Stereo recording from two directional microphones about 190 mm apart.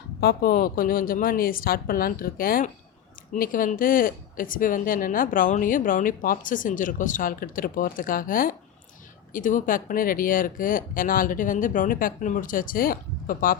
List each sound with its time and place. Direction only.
0.2 s speech: 55° left (ahead or behind)